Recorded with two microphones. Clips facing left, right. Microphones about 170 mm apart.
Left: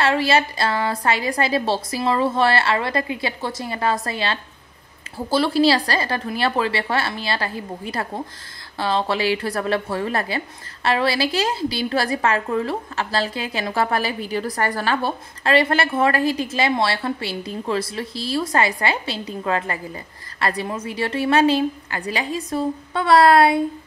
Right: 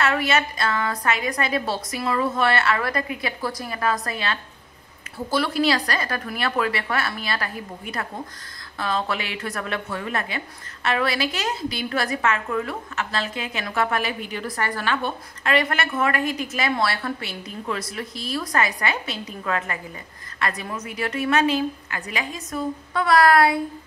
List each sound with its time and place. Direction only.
0.0 s a woman's voice: 30° left (ahead or behind)